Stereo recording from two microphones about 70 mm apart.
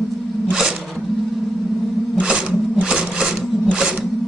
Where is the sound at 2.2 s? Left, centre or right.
Centre.